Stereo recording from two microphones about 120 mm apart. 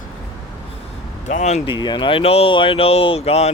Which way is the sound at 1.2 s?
75° left (ahead or behind).